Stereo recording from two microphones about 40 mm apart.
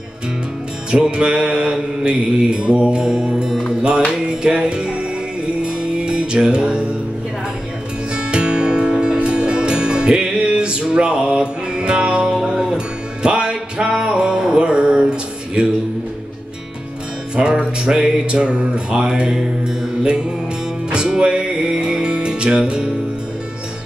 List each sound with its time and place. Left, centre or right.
0.9 s mantra: right
5.6 s music: right
8.1 s music: right
17.4 s mantra: right
20.9 s music: right